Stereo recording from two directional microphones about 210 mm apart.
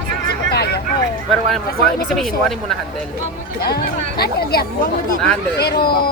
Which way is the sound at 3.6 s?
50° left (ahead or behind).